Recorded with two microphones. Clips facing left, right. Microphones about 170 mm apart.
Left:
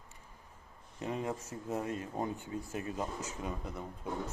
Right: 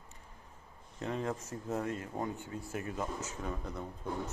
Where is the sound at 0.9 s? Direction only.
15° left (ahead or behind).